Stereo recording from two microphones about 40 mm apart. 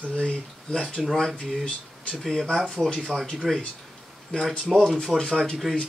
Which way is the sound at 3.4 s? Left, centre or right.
Centre.